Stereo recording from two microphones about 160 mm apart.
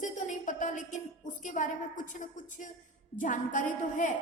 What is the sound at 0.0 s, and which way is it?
A woman's voice, 50° left (ahead or behind).